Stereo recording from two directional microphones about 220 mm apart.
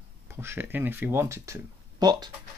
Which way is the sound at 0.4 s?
10° right (ahead or behind).